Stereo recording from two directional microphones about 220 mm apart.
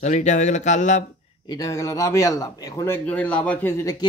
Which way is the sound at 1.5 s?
15° left (ahead or behind).